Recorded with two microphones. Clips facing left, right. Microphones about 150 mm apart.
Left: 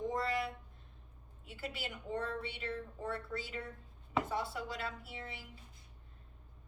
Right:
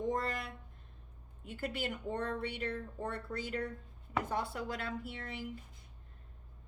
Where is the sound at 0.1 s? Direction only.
50° right (ahead or behind).